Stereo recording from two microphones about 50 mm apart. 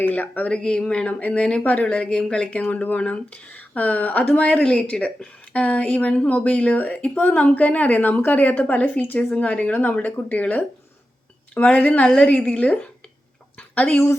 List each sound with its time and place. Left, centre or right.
0.0 s a woman's voice: left
0.5 s a woman's voice: centre
2.8 s a woman's voice: left
9.1 s a woman's voice: left
13.6 s a sound: left